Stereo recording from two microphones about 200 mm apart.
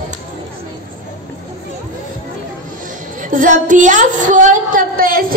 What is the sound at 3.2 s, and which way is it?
A woman's voice, 40° right (ahead or behind).